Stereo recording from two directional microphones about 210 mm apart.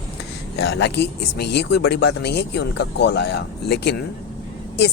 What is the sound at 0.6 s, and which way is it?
Speech, 50° left (ahead or behind).